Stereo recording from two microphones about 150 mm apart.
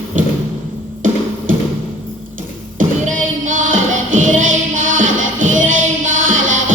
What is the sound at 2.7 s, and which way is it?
Music, 60° right (ahead or behind).